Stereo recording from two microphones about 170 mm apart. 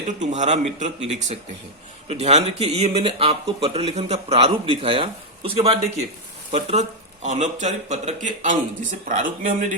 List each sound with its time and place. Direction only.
0.2 s a man's voice: 45° right (ahead or behind)